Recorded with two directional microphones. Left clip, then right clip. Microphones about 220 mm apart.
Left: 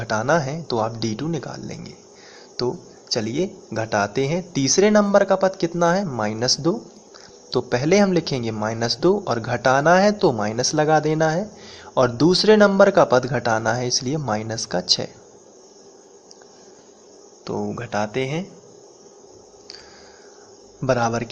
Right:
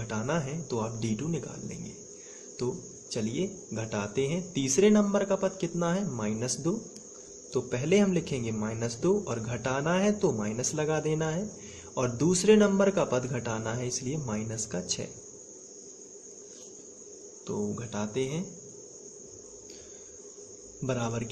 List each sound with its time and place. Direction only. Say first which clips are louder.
0.0 s speech: left 12 dB; 15° left (ahead or behind)
3.1 s speech: left 10 dB; 15° left (ahead or behind)
7.5 s speech: left 9 dB; 15° left (ahead or behind)
17.4 s speech: left 7 dB; 15° left (ahead or behind)
20.8 s speech: left 12 dB; 15° left (ahead or behind)